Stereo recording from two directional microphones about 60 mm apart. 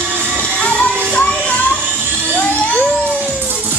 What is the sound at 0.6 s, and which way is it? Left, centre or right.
Music, left.